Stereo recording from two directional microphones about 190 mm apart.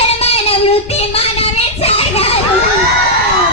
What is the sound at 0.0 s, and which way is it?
Child singing, 30° left (ahead or behind).